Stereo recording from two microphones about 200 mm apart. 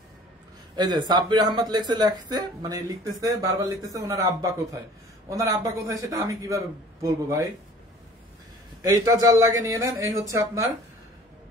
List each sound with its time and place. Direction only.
0.7 s speech: 20° right (ahead or behind)
8.8 s speech: 20° right (ahead or behind)